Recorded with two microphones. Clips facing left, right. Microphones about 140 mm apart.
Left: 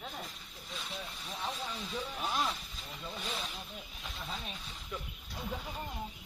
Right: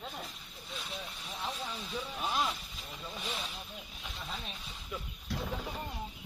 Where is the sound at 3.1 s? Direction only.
5° right (ahead or behind).